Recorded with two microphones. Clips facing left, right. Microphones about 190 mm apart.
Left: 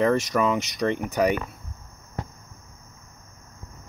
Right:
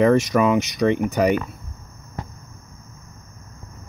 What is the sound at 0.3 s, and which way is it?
Speech, 10° right (ahead or behind).